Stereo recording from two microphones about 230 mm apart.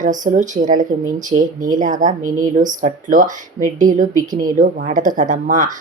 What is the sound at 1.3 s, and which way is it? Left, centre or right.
Speech, right.